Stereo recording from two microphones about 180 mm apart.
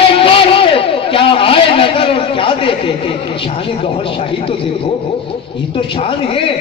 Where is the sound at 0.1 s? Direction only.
30° left (ahead or behind).